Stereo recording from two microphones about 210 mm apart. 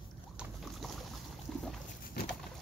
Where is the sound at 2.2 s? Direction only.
50° left (ahead or behind).